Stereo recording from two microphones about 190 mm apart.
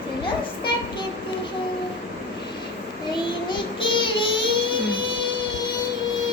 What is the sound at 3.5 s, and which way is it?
Child singing, 25° left (ahead or behind).